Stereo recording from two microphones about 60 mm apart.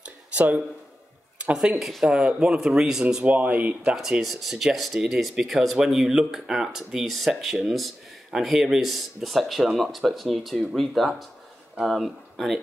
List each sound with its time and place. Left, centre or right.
0.0 s a sound: right
1.4 s speech: centre
1.8 s speech: centre
2.0 s speech: centre
3.3 s speech: right
3.9 s speech: centre